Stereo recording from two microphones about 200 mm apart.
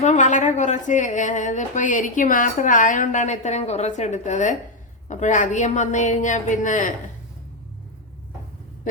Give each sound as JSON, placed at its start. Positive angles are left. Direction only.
{"t": 0.0, "sound": "a woman's voice", "side_deg": 35}